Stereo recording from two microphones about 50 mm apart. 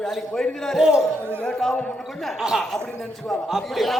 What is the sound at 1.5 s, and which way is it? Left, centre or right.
Speech, centre.